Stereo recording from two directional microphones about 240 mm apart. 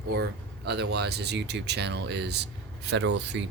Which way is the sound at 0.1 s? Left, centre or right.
Right.